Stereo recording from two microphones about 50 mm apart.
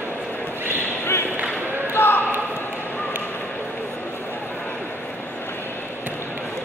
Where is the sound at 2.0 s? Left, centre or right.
Left.